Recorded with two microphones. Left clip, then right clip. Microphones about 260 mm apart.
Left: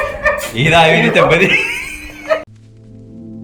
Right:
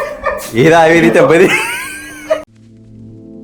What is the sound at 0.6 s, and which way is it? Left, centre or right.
Speech, right.